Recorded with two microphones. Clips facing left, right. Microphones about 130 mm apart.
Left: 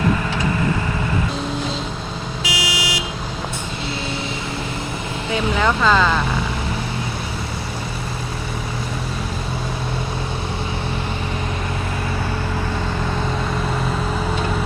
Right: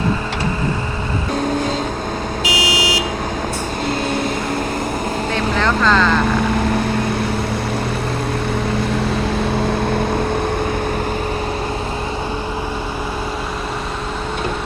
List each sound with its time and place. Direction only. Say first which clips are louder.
2.4 s vehicle: right 4 dB; 25° right (ahead or behind)
5.3 s speech: left 1 dB; 10° left (ahead or behind)